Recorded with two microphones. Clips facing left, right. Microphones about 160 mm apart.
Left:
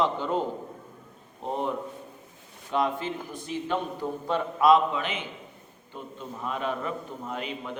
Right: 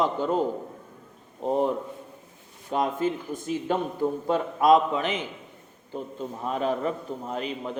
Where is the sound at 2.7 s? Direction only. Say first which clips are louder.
Right 2 dB; 45° right (ahead or behind).